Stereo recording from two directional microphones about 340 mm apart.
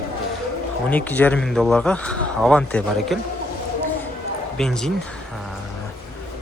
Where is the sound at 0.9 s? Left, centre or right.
Centre.